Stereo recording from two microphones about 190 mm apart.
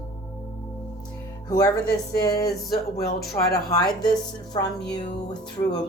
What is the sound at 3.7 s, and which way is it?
Speech, 20° left (ahead or behind).